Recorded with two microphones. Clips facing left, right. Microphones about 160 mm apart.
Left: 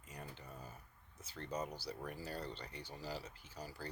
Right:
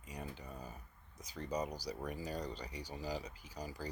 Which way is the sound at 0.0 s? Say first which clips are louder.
Right 4 dB; 15° right (ahead or behind).